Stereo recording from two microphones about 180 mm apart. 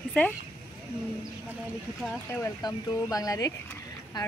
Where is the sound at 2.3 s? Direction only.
20° left (ahead or behind).